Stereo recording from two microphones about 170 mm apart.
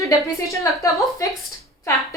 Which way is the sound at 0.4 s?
20° left (ahead or behind).